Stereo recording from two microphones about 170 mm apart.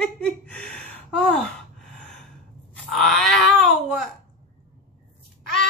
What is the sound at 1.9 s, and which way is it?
Gasp, 5° left (ahead or behind).